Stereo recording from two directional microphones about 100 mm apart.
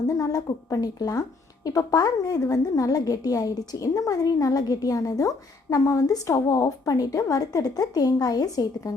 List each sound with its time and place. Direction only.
0.1 s a woman's voice: 35° left (ahead or behind)